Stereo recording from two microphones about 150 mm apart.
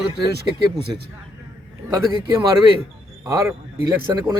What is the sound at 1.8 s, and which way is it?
Speech, 15° right (ahead or behind).